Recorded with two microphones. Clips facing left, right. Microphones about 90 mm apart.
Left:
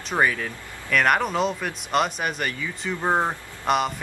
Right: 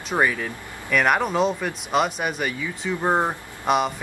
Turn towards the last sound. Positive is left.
turn(degrees=0)  # may be behind; listen again after turning